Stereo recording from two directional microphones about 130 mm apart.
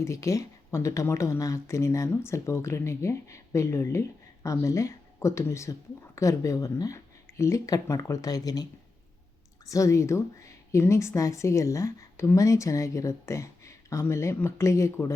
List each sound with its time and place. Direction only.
0.0 s a woman's voice: 25° left (ahead or behind)
9.6 s a woman's voice: 25° left (ahead or behind)